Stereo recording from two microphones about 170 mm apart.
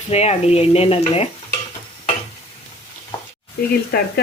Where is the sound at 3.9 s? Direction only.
65° left (ahead or behind).